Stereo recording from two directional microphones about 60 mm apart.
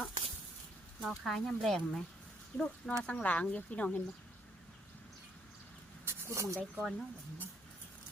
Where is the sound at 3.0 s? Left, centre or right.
Left.